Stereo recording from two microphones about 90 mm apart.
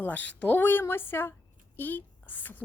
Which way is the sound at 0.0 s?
15° left (ahead or behind).